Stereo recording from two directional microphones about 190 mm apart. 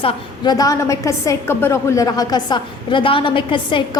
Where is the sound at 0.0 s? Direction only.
20° left (ahead or behind).